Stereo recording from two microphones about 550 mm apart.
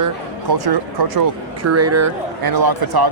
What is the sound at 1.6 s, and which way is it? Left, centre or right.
Speech, right.